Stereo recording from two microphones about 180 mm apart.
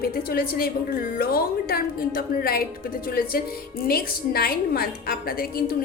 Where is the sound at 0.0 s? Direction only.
55° left (ahead or behind).